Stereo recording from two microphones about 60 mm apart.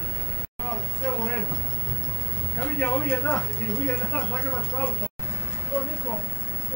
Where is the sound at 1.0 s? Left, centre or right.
Left.